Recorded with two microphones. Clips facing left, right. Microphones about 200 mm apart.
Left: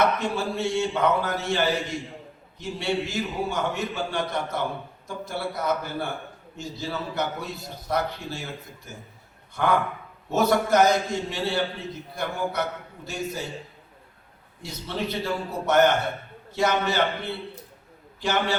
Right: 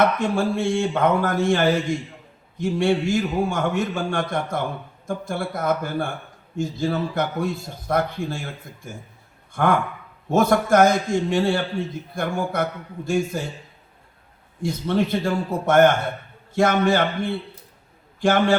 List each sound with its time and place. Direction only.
0.2 s a man's voice: 50° right (ahead or behind)
14.6 s a man's voice: 50° right (ahead or behind)